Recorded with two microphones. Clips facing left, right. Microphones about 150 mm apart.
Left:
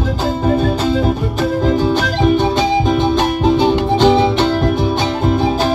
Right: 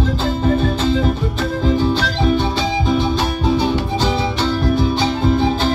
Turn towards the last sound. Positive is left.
turn(degrees=65)  # may be behind; listen again after turning